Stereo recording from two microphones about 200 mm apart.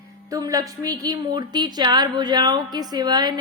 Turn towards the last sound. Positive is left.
turn(degrees=-20)  # may be behind; listen again after turning